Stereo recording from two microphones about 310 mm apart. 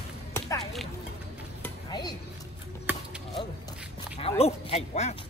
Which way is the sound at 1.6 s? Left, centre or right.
Centre.